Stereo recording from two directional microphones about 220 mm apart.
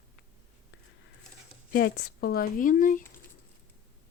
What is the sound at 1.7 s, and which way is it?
Speech, 45° left (ahead or behind).